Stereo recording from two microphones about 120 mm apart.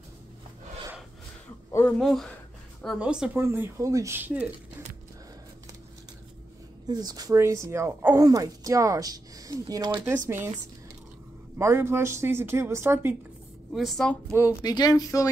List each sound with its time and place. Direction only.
1.7 s a sound: 20° left (ahead or behind)
2.0 s speech: centre (ahead or behind)
3.3 s speech: 20° right (ahead or behind)
6.9 s speech: 35° right (ahead or behind)
11.5 s speech: 20° right (ahead or behind)
13.7 s speech: centre (ahead or behind)
14.3 s speech: 30° left (ahead or behind)